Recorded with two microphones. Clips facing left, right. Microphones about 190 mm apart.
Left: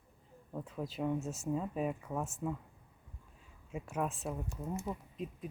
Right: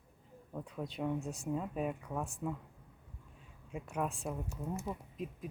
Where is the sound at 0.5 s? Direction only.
Centre (ahead or behind).